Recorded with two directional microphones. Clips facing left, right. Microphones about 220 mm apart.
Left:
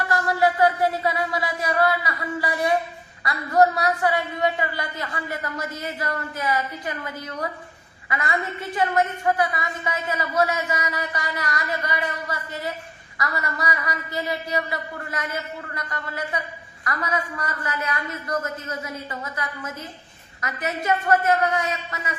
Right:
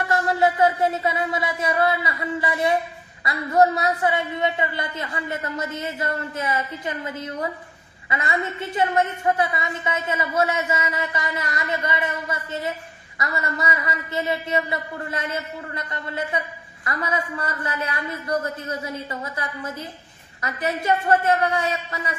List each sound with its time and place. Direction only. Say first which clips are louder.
0.1 s a woman's voice: right 1 dB; 25° right (ahead or behind)